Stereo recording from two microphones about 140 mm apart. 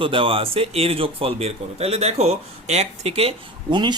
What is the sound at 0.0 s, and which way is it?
Speech, 40° right (ahead or behind).